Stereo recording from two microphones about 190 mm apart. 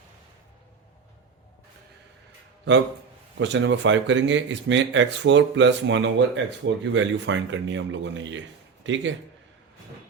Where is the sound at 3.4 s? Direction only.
70° right (ahead or behind).